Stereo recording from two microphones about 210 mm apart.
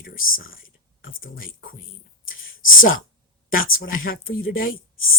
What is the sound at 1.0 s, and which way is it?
Speech, 45° left (ahead or behind).